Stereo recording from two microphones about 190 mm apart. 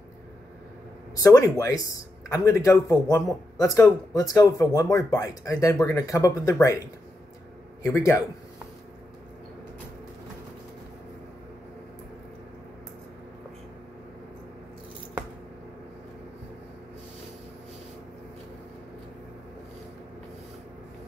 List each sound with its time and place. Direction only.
1.1 s a man's voice: 15° left (ahead or behind)
7.8 s a man's voice: 15° left (ahead or behind)